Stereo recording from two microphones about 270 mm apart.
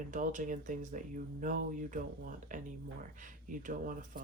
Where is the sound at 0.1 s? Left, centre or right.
Right.